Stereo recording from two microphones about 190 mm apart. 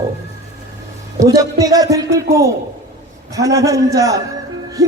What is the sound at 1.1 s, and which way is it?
A man's voice, 15° right (ahead or behind).